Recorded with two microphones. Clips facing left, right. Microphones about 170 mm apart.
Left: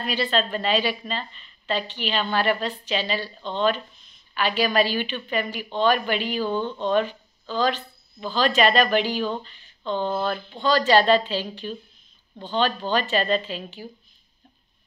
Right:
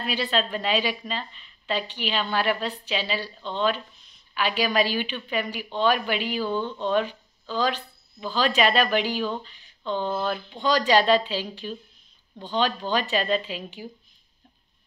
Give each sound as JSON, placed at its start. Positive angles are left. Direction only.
{"t": 0.0, "sound": "a woman's voice", "side_deg": -10}
{"t": 6.4, "sound": "speech", "side_deg": 15}
{"t": 6.8, "sound": "a woman's voice", "side_deg": -5}